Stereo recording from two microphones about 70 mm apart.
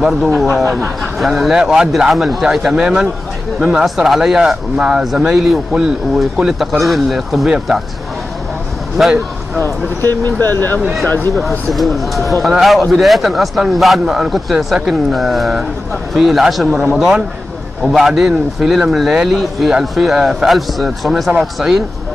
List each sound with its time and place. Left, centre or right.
0.0 s a man's voice: centre
3.8 s a man's voice: centre
9.6 s speech: left
11.7 s a man's voice: centre